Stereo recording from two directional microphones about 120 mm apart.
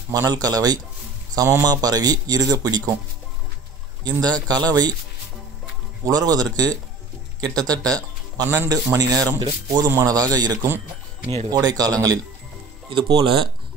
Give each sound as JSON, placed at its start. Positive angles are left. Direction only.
{"t": 0.1, "sound": "a man's voice", "side_deg": -30}
{"t": 4.0, "sound": "a man's voice", "side_deg": -35}
{"t": 6.0, "sound": "a man's voice", "side_deg": -30}
{"t": 11.2, "sound": "speech", "side_deg": -60}
{"t": 11.5, "sound": "a man's voice", "side_deg": -30}
{"t": 12.9, "sound": "speech", "side_deg": -45}